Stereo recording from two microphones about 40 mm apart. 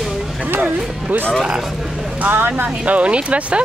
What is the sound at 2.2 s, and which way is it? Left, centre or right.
Speech, right.